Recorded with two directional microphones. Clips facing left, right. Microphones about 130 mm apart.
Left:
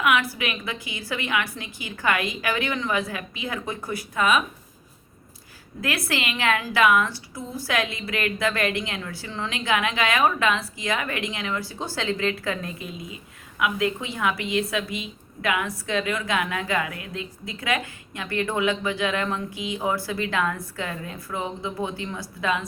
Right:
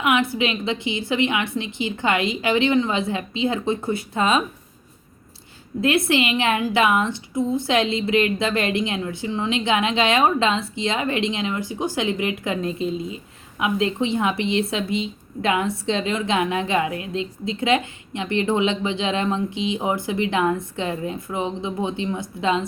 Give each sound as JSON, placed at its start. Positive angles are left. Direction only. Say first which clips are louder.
{"t": 0.0, "sound": "a woman's voice", "louder": "right 3 dB", "side_deg": -25}
{"t": 5.8, "sound": "a woman's voice", "louder": "right 8 dB", "side_deg": -25}